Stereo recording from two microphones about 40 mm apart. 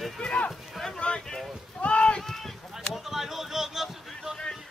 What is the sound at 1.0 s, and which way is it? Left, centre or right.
Boat, left.